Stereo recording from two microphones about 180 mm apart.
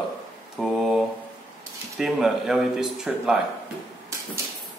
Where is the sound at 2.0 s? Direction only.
Centre (ahead or behind).